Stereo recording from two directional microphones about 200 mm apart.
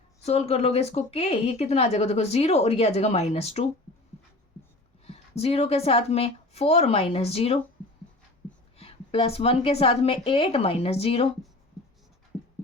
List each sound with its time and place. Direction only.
0.3 s speech: 30° left (ahead or behind)
5.0 s speech: 30° left (ahead or behind)
8.8 s a woman's voice: 30° left (ahead or behind)